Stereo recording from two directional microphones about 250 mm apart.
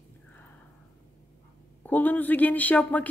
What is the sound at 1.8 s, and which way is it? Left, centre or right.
Speech, centre.